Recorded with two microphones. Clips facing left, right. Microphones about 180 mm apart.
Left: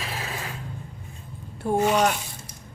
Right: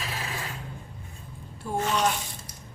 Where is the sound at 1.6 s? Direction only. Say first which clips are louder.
Left 5 dB; 55° left (ahead or behind).